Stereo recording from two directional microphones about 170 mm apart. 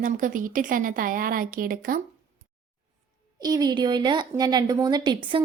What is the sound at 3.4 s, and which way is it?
A woman's voice, 25° right (ahead or behind).